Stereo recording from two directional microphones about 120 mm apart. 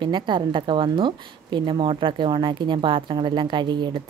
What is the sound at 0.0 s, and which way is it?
A woman's voice, 40° right (ahead or behind).